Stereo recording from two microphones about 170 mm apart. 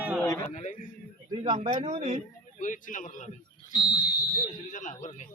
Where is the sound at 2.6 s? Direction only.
50° left (ahead or behind).